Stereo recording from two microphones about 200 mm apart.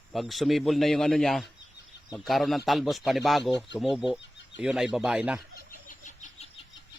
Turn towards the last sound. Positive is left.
turn(degrees=40)  # may be behind; listen again after turning